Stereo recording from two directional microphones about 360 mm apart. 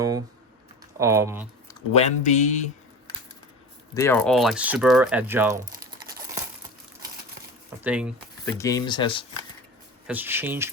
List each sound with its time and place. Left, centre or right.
0.9 s speech: centre
1.6 s speech: centre
3.9 s speech: centre
7.9 s speech: centre
8.5 s speech: centre
10.1 s speech: centre